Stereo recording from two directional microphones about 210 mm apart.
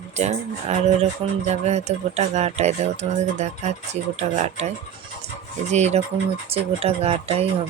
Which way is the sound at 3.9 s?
30° right (ahead or behind).